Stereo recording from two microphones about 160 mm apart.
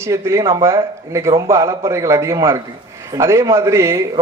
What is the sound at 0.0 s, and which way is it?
A man's voice, 15° right (ahead or behind).